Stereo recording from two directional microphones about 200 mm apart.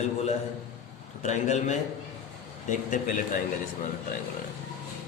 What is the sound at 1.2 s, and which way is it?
Speech, 35° left (ahead or behind).